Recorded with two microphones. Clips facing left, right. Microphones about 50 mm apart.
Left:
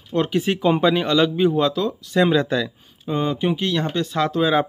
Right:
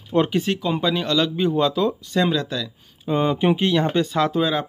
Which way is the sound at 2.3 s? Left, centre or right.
Left.